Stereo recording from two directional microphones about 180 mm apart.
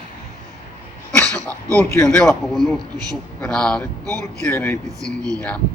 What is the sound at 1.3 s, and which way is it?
Speech, 20° right (ahead or behind).